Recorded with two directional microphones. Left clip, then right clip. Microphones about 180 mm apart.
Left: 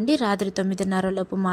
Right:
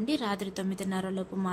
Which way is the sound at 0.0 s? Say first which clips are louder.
Left 9 dB; 40° left (ahead or behind).